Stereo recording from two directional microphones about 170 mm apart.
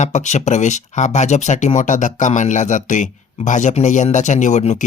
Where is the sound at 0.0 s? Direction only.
45° left (ahead or behind).